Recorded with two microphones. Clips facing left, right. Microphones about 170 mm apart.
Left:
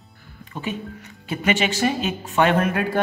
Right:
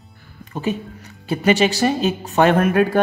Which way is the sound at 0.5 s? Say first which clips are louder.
Right 5 dB; 40° right (ahead or behind).